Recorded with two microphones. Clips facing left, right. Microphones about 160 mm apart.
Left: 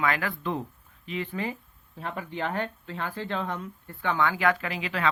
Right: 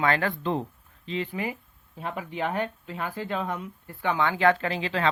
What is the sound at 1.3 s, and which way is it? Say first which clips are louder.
Speech: even; 15° right (ahead or behind).